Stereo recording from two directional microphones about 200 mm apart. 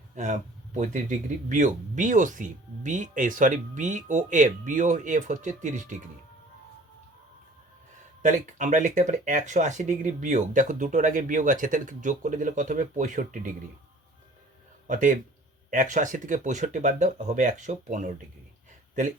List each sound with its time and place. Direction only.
0.2 s speech: 40° right (ahead or behind)
8.2 s speech: 40° right (ahead or behind)
14.8 s speech: 40° right (ahead or behind)